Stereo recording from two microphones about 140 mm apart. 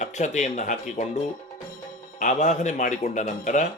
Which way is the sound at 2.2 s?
60° left (ahead or behind).